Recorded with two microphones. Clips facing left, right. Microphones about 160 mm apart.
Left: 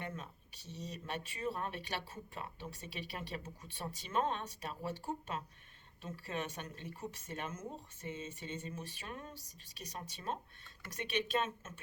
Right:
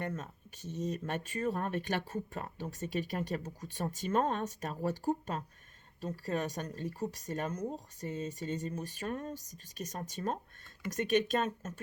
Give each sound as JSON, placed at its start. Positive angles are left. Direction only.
{"t": 0.2, "sound": "speech", "side_deg": -50}